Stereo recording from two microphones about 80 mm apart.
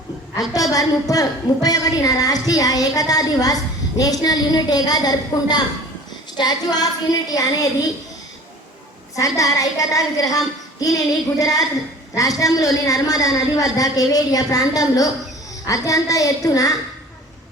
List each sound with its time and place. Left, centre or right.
0.7 s a woman's voice: left
9.1 s a woman's voice: left